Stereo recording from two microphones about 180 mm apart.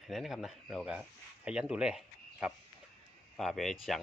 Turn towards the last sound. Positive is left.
turn(degrees=0)  # may be behind; listen again after turning